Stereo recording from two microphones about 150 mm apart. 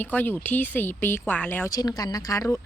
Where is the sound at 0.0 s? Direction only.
10° left (ahead or behind).